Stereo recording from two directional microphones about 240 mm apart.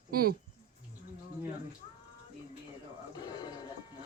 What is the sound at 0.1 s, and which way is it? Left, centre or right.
Speech, right.